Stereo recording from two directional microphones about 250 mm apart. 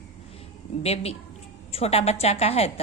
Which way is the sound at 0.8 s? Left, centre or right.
Left.